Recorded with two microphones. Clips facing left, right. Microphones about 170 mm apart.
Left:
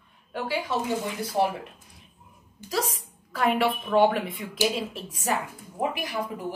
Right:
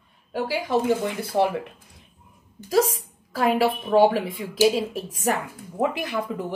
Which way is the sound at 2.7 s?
40° right (ahead or behind).